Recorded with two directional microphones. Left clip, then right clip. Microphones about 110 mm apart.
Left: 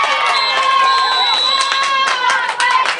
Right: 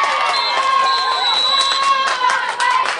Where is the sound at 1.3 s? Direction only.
15° left (ahead or behind).